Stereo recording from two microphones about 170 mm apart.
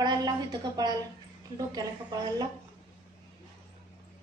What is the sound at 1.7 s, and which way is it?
Speech, 20° right (ahead or behind).